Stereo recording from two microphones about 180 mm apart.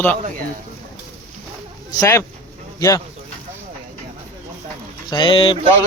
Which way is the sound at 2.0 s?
15° left (ahead or behind).